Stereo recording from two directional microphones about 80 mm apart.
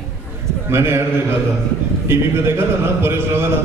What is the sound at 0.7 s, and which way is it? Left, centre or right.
A man's voice, right.